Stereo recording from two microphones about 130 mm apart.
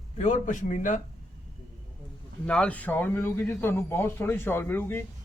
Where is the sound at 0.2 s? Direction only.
65° left (ahead or behind).